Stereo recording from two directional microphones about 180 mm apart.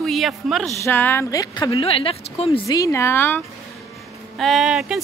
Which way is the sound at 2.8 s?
15° left (ahead or behind).